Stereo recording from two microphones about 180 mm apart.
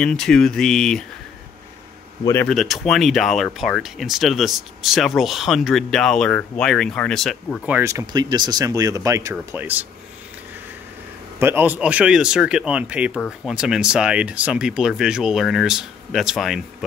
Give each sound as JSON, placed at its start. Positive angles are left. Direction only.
{"t": 0.0, "sound": "speech", "side_deg": 5}
{"t": 2.4, "sound": "speech", "side_deg": 0}
{"t": 7.6, "sound": "speech", "side_deg": -10}
{"t": 7.9, "sound": "speech", "side_deg": -25}
{"t": 11.3, "sound": "speech", "side_deg": -10}